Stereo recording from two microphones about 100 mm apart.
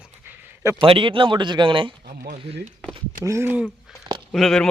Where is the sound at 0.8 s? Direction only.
60° right (ahead or behind).